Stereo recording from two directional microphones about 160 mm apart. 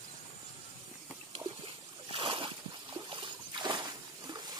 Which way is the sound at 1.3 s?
35° right (ahead or behind).